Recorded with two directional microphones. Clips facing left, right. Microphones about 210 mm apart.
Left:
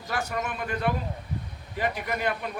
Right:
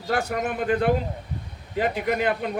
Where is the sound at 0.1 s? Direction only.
55° right (ahead or behind).